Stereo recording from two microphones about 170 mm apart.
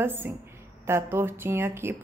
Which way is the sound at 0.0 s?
15° right (ahead or behind).